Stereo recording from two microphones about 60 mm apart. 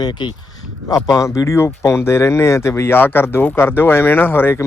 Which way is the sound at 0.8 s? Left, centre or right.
Left.